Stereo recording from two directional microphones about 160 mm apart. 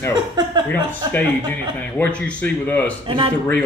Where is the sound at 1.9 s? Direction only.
10° left (ahead or behind).